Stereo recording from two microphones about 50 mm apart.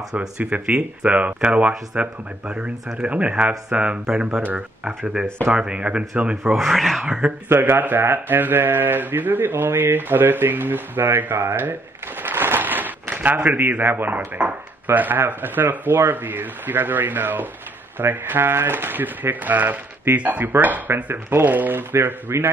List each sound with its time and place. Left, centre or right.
0.4 s speech: right
6.5 s speech: centre
7.1 s speech: centre
7.4 s speech: right
12.2 s a sound: right
13.1 s speech: right
13.6 s speech: right
20.9 s speech: right
21.5 s speech: right